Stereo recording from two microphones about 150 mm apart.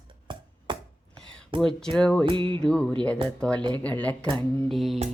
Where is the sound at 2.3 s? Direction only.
35° right (ahead or behind).